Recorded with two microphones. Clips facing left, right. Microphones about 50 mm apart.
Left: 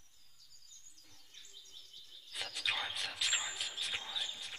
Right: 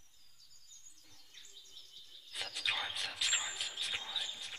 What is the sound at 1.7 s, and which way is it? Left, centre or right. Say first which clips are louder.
Bird: even; left.